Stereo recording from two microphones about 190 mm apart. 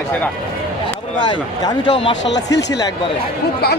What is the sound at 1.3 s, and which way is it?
Speech, 25° left (ahead or behind).